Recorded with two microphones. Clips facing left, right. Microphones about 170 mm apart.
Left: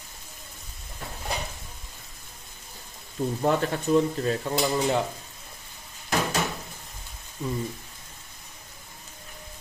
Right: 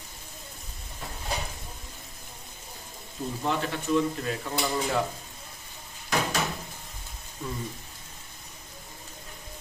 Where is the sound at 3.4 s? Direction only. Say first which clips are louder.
Left 5 dB; 40° left (ahead or behind).